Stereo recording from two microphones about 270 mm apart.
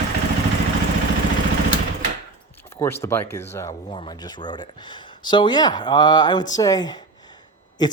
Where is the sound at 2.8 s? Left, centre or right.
Centre.